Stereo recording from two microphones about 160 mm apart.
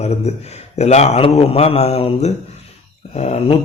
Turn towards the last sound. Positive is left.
turn(degrees=40)  # may be behind; listen again after turning